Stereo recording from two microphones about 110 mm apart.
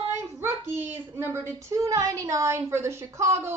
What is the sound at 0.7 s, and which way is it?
Speech, 20° right (ahead or behind).